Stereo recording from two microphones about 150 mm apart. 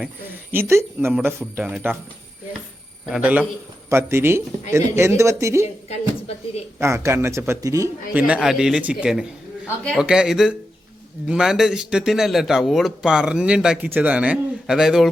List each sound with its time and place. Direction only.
0.0 s speech: 15° right (ahead or behind)
3.1 s speech: 10° right (ahead or behind)
6.7 s speech: 20° right (ahead or behind)
8.1 s a man's voice: 5° right (ahead or behind)
9.6 s a man's voice: 5° left (ahead or behind)
10.0 s a man's voice: 5° right (ahead or behind)